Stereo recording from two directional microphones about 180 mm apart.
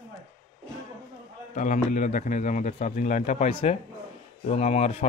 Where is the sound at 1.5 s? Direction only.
45° left (ahead or behind).